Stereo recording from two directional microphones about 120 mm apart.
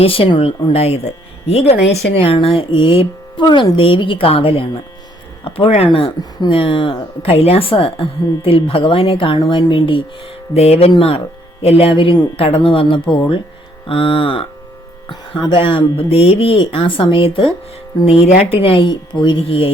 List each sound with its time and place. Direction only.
0.0 s speech: 50° left (ahead or behind)
18.8 s speech: 40° left (ahead or behind)